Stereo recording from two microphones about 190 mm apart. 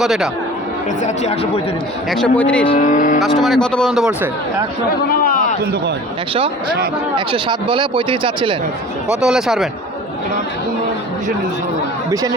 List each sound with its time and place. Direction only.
0.0 s speech: centre (ahead or behind)
1.0 s speech: 35° left (ahead or behind)
2.0 s a man's voice: 5° left (ahead or behind)
2.7 s speech: 45° left (ahead or behind)
3.2 s speech: centre (ahead or behind)
5.0 s a sound: 50° left (ahead or behind)
7.3 s speech: 25° right (ahead or behind)
9.0 s speech: 5° right (ahead or behind)